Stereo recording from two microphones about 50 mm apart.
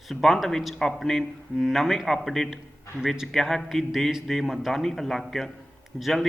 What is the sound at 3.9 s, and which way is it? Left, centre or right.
A man's voice, centre.